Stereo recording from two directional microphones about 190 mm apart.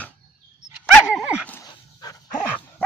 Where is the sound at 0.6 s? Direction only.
5° right (ahead or behind).